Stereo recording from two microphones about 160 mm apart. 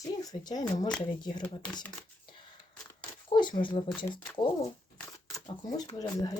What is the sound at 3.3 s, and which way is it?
Speech, 30° left (ahead or behind).